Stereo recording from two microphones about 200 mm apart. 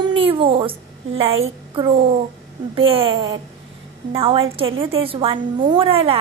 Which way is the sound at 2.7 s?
25° right (ahead or behind).